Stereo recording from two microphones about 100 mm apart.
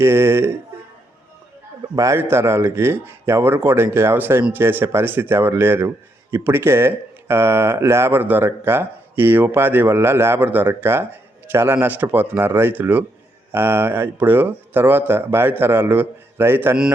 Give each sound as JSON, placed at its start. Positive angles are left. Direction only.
{"t": 0.0, "sound": "speech", "side_deg": -25}
{"t": 2.1, "sound": "speech", "side_deg": -25}